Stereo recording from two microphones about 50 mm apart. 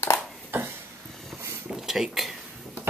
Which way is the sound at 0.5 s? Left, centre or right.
Right.